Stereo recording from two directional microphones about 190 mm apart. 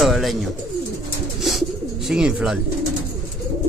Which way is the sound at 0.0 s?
Centre (ahead or behind).